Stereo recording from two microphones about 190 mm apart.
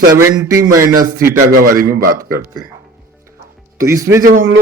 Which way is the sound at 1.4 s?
50° right (ahead or behind).